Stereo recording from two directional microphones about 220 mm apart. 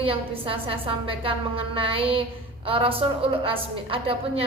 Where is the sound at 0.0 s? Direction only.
25° right (ahead or behind).